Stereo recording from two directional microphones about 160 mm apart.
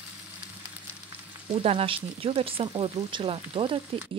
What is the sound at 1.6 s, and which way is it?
Speech, 35° right (ahead or behind).